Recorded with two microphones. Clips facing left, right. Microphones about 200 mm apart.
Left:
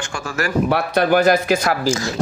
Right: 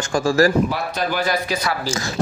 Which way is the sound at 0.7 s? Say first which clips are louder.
Left 7 dB; 60° left (ahead or behind).